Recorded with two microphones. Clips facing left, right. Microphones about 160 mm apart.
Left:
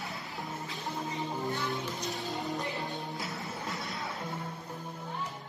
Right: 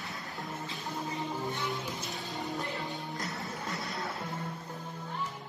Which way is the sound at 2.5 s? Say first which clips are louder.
Left 1 dB; 20° left (ahead or behind).